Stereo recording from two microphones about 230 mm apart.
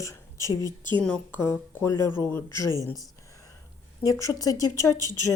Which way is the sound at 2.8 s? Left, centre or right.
Centre.